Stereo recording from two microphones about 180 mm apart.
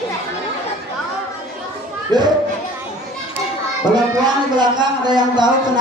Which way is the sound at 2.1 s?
25° right (ahead or behind).